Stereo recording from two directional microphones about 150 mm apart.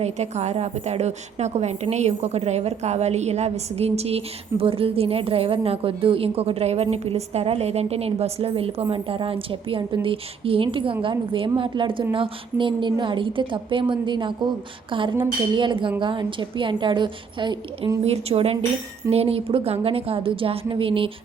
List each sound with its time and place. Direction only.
0.0 s a woman's voice: 50° right (ahead or behind); by 17.9 s 30° right (ahead or behind)
18.0 s a woman's voice: 45° right (ahead or behind)